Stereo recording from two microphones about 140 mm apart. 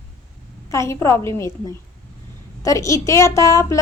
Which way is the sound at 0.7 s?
20° left (ahead or behind).